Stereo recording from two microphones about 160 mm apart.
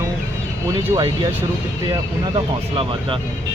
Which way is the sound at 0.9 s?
30° right (ahead or behind).